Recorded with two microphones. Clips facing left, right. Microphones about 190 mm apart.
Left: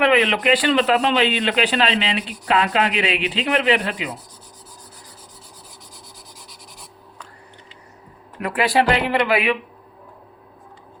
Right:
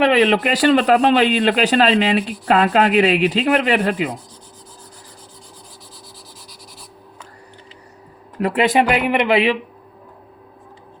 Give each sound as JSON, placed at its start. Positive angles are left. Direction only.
{"t": 0.0, "sound": "speech", "side_deg": -35}
{"t": 8.4, "sound": "speech", "side_deg": -25}